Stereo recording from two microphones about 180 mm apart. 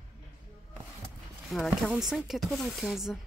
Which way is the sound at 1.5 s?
Centre (ahead or behind).